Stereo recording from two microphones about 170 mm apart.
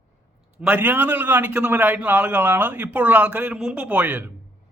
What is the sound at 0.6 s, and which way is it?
A man's voice, 10° right (ahead or behind).